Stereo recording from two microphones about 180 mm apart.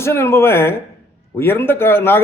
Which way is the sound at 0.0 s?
15° left (ahead or behind).